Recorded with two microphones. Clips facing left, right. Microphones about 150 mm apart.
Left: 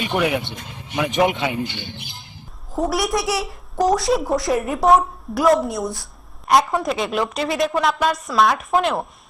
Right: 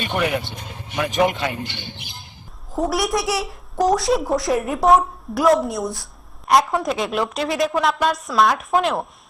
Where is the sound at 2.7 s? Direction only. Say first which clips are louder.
Even; centre (ahead or behind).